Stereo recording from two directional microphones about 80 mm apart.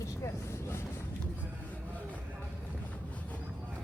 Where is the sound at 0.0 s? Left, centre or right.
Left.